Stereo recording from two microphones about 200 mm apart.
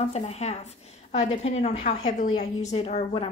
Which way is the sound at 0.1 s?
35° left (ahead or behind).